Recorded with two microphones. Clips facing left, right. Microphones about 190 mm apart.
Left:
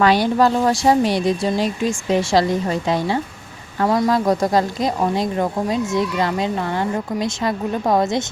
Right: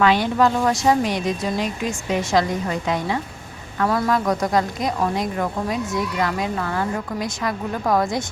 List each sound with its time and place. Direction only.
0.0 s speech: 35° left (ahead or behind)